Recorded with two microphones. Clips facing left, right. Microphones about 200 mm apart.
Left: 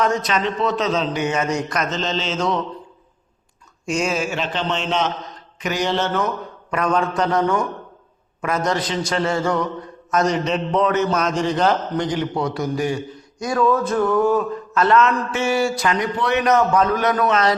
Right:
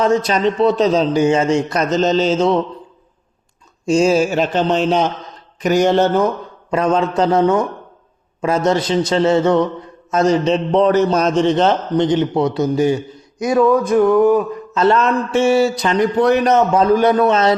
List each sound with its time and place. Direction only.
0.0 s a man's voice: 30° right (ahead or behind)
3.8 s a man's voice: 30° right (ahead or behind); by 6.1 s 45° right (ahead or behind)
6.1 s a man's voice: 30° right (ahead or behind)
16.0 s a man's voice: 40° right (ahead or behind)